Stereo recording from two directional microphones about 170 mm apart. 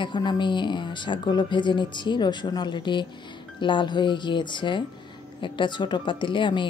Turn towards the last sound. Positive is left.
turn(degrees=30)  # may be behind; listen again after turning